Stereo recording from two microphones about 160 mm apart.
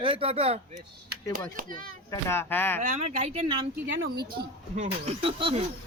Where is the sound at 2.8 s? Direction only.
45° right (ahead or behind).